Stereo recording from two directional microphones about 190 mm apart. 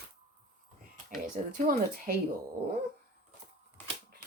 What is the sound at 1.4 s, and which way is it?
Speech, 30° right (ahead or behind).